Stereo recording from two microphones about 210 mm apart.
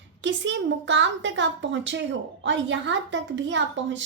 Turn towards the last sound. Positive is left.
turn(degrees=-60)  # may be behind; listen again after turning